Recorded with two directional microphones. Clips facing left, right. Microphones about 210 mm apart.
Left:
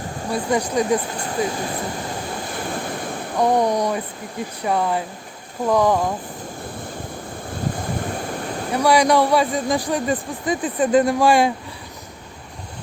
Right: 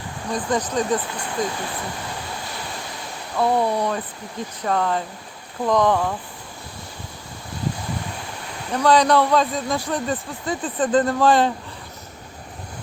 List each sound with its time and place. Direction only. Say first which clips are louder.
0.3 s speech: left 2 dB; 10° left (ahead or behind)
2.6 s waves: left 7 dB; 50° left (ahead or behind)
3.3 s speech: left 2 dB; 15° left (ahead or behind)
8.0 s waterfall: left 7 dB; 50° left (ahead or behind)
8.7 s speech: even; 10° left (ahead or behind)